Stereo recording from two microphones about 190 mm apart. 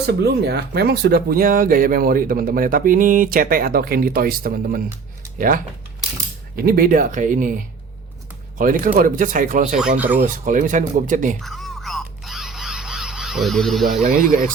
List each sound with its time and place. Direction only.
0.0 s speech: 60° right (ahead or behind)
6.6 s speech: 50° right (ahead or behind)
8.5 s speech: 45° right (ahead or behind)
11.3 s music: centre (ahead or behind)
14.0 s speech: 50° right (ahead or behind)